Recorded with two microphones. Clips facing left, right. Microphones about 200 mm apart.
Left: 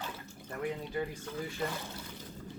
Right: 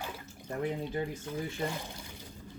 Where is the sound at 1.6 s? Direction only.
15° right (ahead or behind).